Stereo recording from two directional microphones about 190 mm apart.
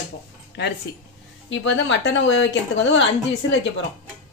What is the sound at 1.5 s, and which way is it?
Speech, 75° left (ahead or behind).